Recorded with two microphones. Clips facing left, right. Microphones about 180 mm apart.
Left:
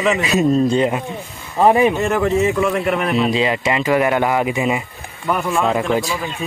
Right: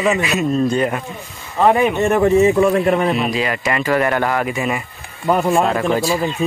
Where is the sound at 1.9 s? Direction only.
25° right (ahead or behind).